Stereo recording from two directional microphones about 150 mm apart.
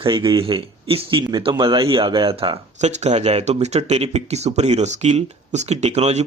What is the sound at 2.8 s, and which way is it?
Speech, 50° right (ahead or behind).